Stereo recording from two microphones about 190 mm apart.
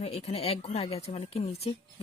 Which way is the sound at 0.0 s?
30° left (ahead or behind).